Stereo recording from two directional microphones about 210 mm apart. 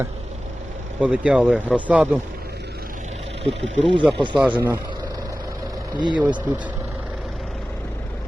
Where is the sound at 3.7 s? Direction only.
25° right (ahead or behind).